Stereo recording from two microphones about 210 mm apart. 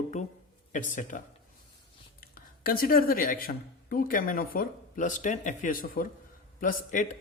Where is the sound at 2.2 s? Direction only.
45° left (ahead or behind).